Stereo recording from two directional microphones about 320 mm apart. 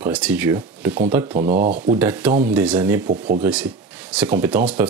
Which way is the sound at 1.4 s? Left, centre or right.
Right.